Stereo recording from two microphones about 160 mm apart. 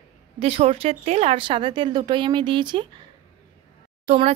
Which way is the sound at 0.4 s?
35° right (ahead or behind).